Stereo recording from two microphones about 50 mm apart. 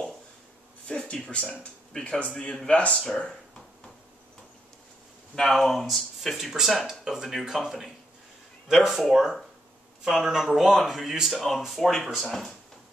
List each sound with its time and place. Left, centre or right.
0.8 s a man's voice: centre
2.7 s a sound: left
5.5 s speech: centre